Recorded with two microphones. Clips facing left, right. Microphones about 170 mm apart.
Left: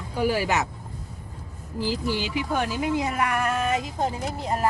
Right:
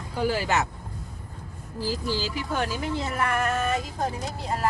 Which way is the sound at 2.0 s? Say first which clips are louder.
Left 2 dB; 20° left (ahead or behind).